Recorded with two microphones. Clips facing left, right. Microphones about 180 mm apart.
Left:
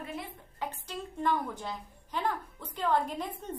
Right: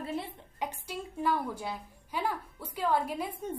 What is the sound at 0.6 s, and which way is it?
A woman's voice, 10° right (ahead or behind).